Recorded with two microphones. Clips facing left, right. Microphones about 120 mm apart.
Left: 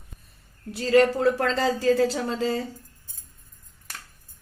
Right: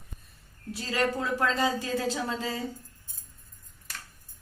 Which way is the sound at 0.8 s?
65° left (ahead or behind).